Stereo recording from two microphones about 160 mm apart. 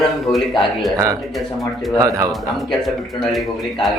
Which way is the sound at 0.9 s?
20° right (ahead or behind).